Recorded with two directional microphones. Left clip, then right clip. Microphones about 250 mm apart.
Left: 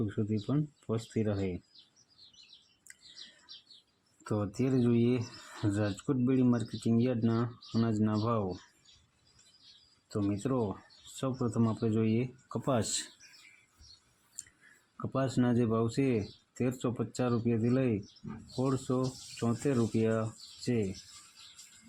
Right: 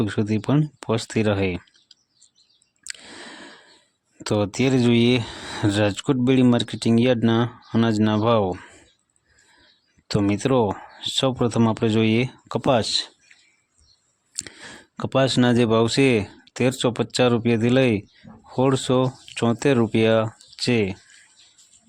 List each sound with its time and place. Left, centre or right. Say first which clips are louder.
0.0 s speech: right 11 dB; right
4.3 s speech: right 12 dB; right
10.1 s speech: right 12 dB; right; by 13.1 s centre
14.9 s speech: right 13 dB; right